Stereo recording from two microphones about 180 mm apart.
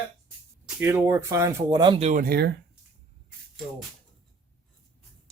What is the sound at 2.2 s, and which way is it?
Speech, 60° right (ahead or behind).